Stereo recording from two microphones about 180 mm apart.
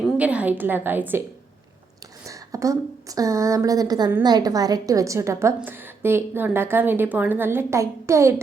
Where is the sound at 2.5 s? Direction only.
20° right (ahead or behind).